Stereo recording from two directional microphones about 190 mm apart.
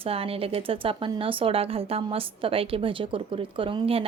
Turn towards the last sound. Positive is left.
turn(degrees=-30)  # may be behind; listen again after turning